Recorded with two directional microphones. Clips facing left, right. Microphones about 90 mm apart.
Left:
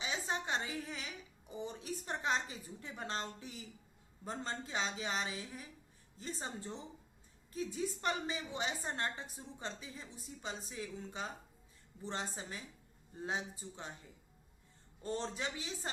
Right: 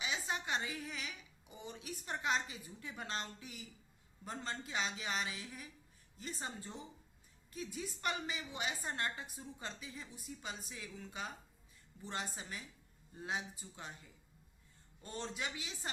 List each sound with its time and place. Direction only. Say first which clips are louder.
0.0 s a woman's voice: left 1 dB; 35° left (ahead or behind)